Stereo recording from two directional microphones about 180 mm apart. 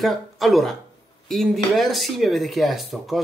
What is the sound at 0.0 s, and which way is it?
Speech, centre (ahead or behind).